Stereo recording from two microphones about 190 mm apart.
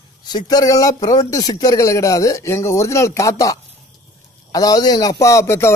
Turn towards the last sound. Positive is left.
turn(degrees=15)  # may be behind; listen again after turning